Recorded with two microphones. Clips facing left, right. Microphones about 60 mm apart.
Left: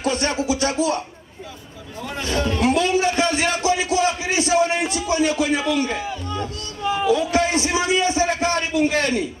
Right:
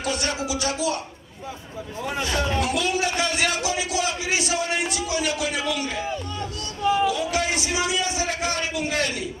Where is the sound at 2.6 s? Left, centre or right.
Left.